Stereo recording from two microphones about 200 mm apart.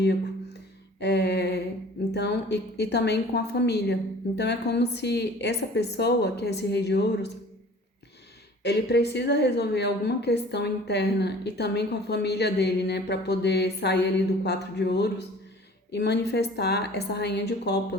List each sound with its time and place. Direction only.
0.9 s a sound: 55° left (ahead or behind)
2.1 s a woman's voice: 55° left (ahead or behind)
8.6 s a woman's voice: 55° left (ahead or behind)